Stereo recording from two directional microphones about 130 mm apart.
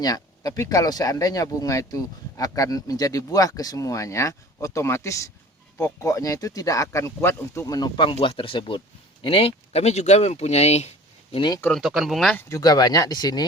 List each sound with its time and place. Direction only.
0.0 s speech: 30° left (ahead or behind); by 11.3 s 60° left (ahead or behind)
11.3 s speech: 35° left (ahead or behind)
11.8 s speech: 5° right (ahead or behind)
12.5 s speech: 30° left (ahead or behind)